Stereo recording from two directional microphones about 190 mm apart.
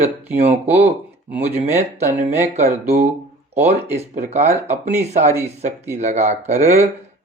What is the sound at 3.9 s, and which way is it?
Speech, 35° right (ahead or behind).